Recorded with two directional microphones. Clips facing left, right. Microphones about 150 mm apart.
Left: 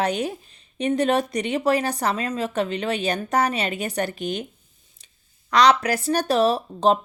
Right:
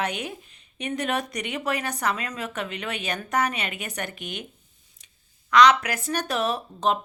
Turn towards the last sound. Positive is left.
turn(degrees=30)  # may be behind; listen again after turning